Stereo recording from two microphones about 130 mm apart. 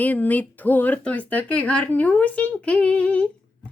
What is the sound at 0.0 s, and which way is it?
A woman's voice, 15° left (ahead or behind).